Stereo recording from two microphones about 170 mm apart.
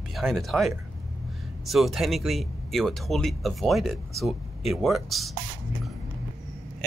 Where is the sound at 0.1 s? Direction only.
Centre (ahead or behind).